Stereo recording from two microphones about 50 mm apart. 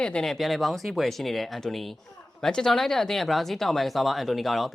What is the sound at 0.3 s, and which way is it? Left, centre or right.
Speech, centre.